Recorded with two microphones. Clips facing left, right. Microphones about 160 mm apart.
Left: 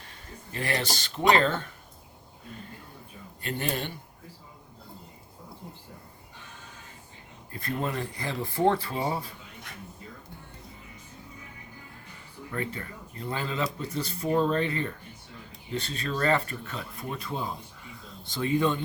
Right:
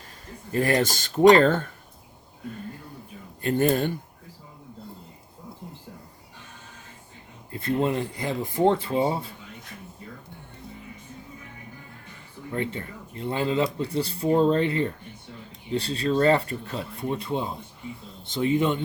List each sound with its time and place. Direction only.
0.5 s speech: 45° right (ahead or behind)
3.4 s speech: 45° right (ahead or behind)
7.5 s speech: 25° right (ahead or behind)
12.5 s speech: 25° right (ahead or behind)